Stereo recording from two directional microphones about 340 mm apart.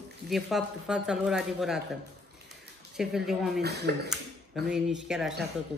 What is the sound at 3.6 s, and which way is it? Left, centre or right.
Speech, right.